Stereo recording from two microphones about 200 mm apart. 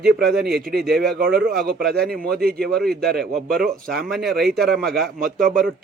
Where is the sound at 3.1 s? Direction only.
Centre (ahead or behind).